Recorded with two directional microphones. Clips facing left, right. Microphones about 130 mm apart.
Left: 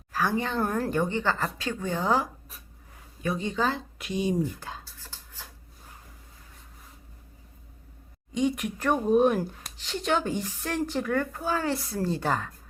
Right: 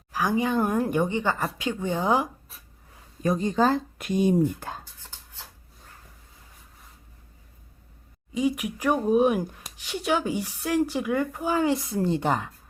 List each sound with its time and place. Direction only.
0.1 s speech: 15° right (ahead or behind)
3.2 s speech: 40° right (ahead or behind)
8.3 s speech: 5° right (ahead or behind)